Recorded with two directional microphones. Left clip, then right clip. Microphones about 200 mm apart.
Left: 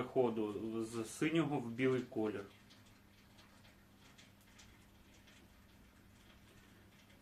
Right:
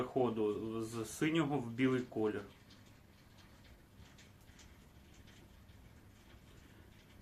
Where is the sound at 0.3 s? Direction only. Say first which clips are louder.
Right 3 dB; 20° right (ahead or behind).